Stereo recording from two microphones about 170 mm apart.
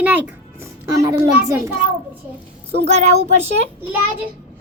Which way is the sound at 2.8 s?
40° right (ahead or behind).